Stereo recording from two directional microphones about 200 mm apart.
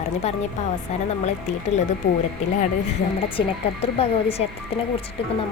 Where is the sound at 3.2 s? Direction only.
25° left (ahead or behind).